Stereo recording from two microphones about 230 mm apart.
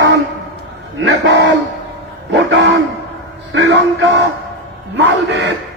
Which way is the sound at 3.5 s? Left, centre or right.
Right.